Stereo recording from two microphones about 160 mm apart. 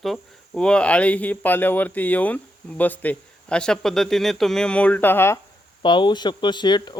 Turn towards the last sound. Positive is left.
turn(degrees=25)  # may be behind; listen again after turning